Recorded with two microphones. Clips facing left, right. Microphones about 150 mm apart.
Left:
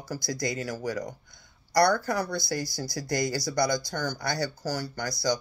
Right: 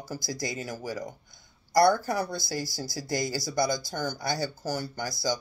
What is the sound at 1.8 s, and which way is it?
Speech, 20° right (ahead or behind).